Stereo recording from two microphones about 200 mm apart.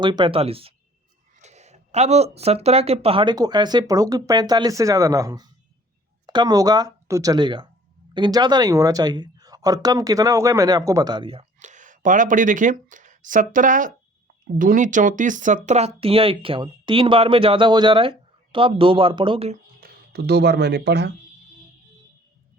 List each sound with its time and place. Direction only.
0.0 s speech: 20° right (ahead or behind)
19.8 s speech: 50° right (ahead or behind)